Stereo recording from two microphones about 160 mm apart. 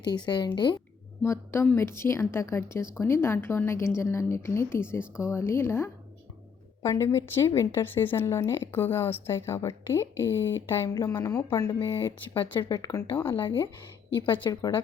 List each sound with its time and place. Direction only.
0.0 s a woman's voice: 25° left (ahead or behind)
1.2 s a woman's voice: 15° left (ahead or behind)
13.2 s a woman's voice: 30° left (ahead or behind)